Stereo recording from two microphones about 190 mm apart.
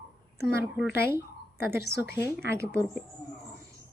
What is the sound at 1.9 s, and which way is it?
Speech, 10° right (ahead or behind).